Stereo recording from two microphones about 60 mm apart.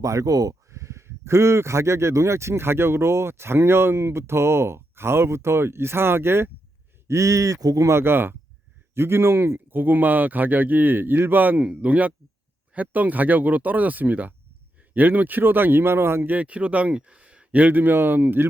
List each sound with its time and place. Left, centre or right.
0.0 s speech: right
0.7 s speech: right
7.1 s speech: right
7.9 s speech: right
16.3 s speech: right